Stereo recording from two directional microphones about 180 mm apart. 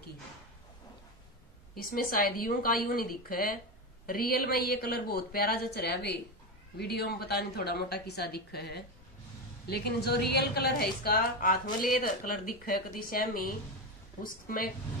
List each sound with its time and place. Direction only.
1.8 s a woman's voice: 55° left (ahead or behind)